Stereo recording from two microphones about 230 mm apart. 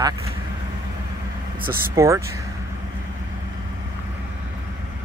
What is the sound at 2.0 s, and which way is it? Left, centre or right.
Speech, centre.